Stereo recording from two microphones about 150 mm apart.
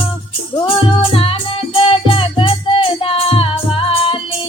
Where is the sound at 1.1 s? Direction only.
35° left (ahead or behind).